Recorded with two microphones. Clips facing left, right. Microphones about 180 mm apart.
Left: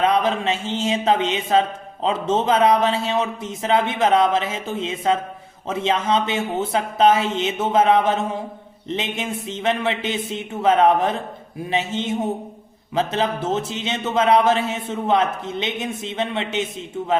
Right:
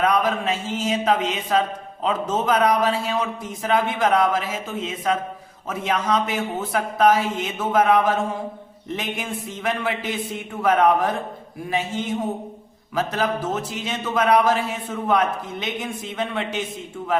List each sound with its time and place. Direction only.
0.0 s speech: 25° left (ahead or behind)